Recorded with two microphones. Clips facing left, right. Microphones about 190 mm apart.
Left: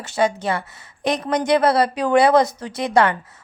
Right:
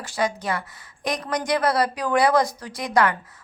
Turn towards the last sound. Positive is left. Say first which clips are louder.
# left 4 dB
turn(degrees=25)  # may be behind; listen again after turning